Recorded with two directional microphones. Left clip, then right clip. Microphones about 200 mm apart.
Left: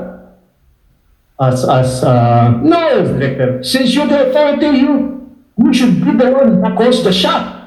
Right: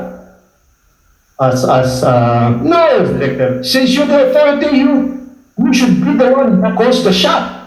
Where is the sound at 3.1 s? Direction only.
20° left (ahead or behind).